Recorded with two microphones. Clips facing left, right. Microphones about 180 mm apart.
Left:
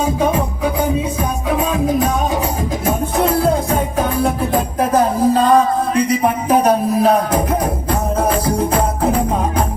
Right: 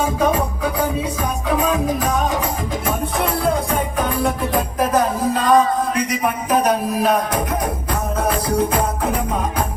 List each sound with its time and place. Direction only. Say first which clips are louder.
4.8 s music: left 4 dB; 30° left (ahead or behind)
5.9 s speech: left 5 dB; 30° left (ahead or behind)